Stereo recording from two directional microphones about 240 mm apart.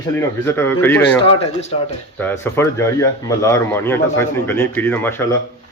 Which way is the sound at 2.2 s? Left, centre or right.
Centre.